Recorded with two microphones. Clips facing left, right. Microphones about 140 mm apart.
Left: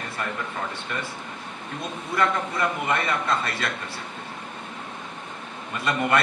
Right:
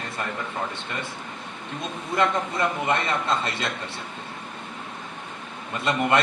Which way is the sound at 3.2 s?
25° right (ahead or behind).